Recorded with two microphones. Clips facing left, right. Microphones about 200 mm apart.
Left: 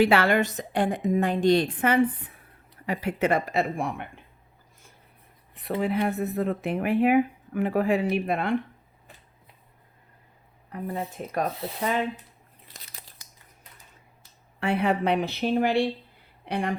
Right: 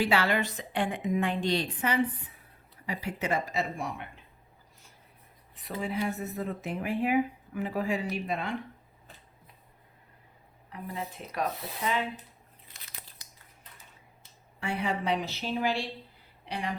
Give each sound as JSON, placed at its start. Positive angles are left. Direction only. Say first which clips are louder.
{"t": 0.0, "sound": "a woman's voice", "louder": "left 6 dB", "side_deg": 55}
{"t": 5.5, "sound": "speech", "louder": "left 7 dB", "side_deg": 60}
{"t": 10.7, "sound": "a woman's voice", "louder": "left 6 dB", "side_deg": 50}
{"t": 14.6, "sound": "a woman's voice", "louder": "left 7 dB", "side_deg": 60}